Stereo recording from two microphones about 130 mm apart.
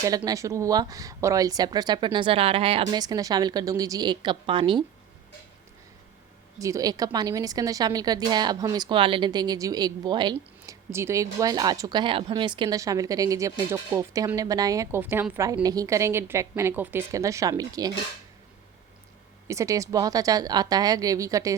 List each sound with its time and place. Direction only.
0.3 s speech: 25° right (ahead or behind); by 2.9 s 45° right (ahead or behind)
2.9 s speech: 30° right (ahead or behind)
6.6 s a woman's voice: 25° right (ahead or behind)
10.9 s a woman's voice: 20° right (ahead or behind)
15.6 s a woman's voice: 30° right (ahead or behind)
19.5 s a woman's voice: 25° right (ahead or behind)